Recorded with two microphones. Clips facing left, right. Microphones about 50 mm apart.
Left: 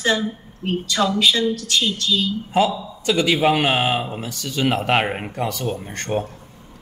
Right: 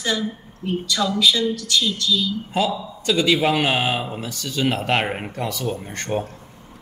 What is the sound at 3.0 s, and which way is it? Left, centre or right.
Speech, left.